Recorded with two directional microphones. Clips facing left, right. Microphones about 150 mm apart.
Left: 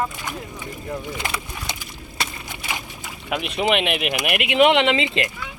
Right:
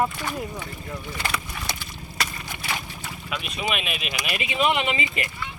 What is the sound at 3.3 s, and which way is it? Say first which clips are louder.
Speech: left 8 dB; 65° left (ahead or behind).